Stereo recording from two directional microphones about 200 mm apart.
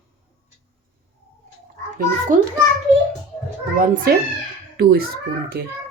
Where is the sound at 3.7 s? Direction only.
45° right (ahead or behind).